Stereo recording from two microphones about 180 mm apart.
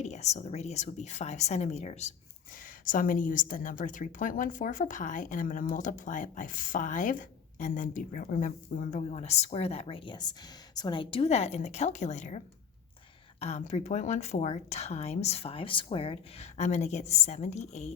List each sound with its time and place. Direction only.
0.0 s speech: 40° left (ahead or behind)
2.6 s a woman's voice: 50° left (ahead or behind)
13.4 s speech: 35° left (ahead or behind)